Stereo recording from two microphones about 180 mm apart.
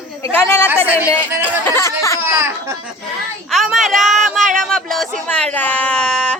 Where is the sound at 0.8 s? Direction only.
10° right (ahead or behind).